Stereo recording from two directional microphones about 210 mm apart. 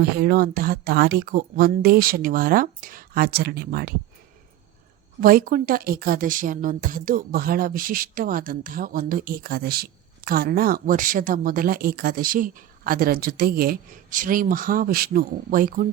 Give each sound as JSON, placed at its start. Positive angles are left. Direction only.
{"t": 0.0, "sound": "a woman's voice", "side_deg": -45}
{"t": 5.2, "sound": "a woman's voice", "side_deg": -45}